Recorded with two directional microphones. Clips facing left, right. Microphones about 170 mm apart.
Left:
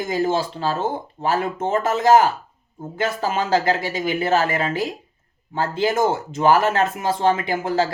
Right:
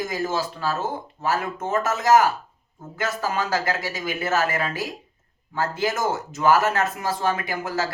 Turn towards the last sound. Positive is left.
turn(degrees=25)  # may be behind; listen again after turning